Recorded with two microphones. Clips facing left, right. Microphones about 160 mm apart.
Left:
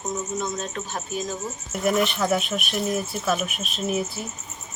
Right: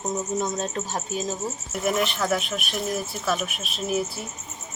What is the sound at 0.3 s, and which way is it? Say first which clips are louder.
Speech: right 2 dB; 35° right (ahead or behind).